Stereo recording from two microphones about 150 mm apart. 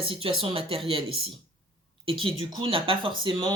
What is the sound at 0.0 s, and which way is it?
Speech, 40° right (ahead or behind).